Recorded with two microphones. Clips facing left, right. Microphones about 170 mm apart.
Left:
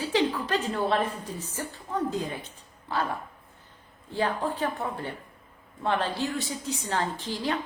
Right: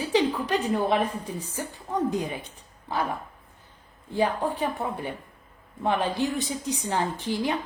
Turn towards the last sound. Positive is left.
turn(degrees=-15)  # may be behind; listen again after turning